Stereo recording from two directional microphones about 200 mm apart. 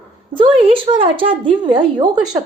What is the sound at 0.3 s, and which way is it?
A woman's voice, 25° right (ahead or behind).